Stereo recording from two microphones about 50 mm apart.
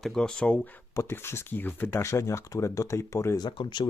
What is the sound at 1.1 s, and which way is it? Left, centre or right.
Speech, left.